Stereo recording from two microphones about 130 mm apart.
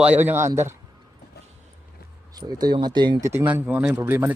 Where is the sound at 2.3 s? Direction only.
30° right (ahead or behind).